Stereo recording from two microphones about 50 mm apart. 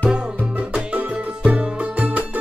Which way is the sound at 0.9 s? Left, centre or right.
Right.